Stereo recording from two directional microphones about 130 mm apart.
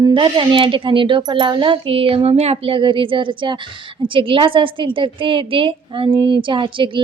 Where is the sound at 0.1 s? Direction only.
40° right (ahead or behind).